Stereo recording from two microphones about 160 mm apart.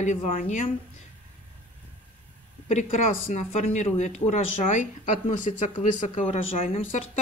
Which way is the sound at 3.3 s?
45° left (ahead or behind).